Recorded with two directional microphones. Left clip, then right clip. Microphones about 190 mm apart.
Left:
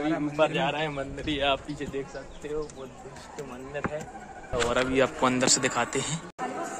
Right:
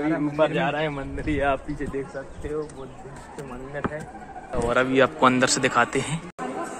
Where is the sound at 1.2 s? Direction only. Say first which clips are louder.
Right 3 dB; 15° right (ahead or behind).